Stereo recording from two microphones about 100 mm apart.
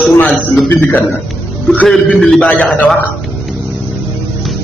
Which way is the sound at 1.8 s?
5° left (ahead or behind).